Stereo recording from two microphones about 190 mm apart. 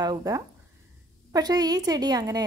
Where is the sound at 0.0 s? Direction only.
20° right (ahead or behind).